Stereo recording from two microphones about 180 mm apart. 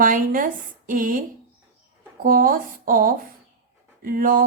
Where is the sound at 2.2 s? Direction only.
50° right (ahead or behind).